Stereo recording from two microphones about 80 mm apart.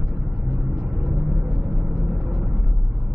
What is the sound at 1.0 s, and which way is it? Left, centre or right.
Vehicle, centre.